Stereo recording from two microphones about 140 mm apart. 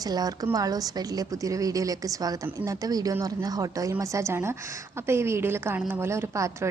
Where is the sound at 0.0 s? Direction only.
25° right (ahead or behind).